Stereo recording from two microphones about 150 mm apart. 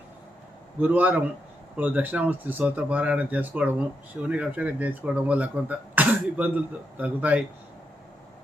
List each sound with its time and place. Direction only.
0.8 s speech: 10° right (ahead or behind)